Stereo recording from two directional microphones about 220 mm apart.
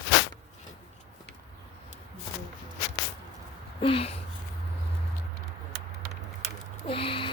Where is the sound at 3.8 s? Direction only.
25° left (ahead or behind).